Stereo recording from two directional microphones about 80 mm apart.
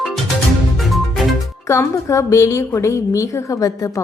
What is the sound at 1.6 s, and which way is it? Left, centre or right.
A woman's voice, left.